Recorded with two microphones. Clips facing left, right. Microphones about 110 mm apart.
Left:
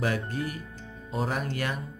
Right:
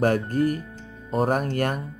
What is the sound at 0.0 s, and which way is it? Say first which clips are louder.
Speech: right 8 dB; 45° right (ahead or behind).